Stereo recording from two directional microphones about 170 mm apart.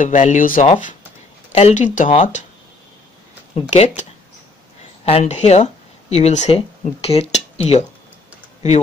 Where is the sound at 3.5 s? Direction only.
40° left (ahead or behind).